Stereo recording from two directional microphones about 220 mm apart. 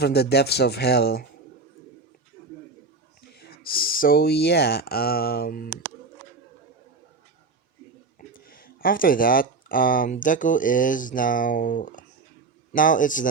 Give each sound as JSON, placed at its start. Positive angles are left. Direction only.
{"t": 0.0, "sound": "speech", "side_deg": 45}
{"t": 3.3, "sound": "speech", "side_deg": 45}
{"t": 8.4, "sound": "speech", "side_deg": 40}